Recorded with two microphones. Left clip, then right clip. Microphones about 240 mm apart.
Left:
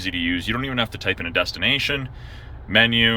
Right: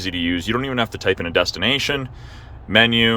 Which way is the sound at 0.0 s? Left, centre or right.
Right.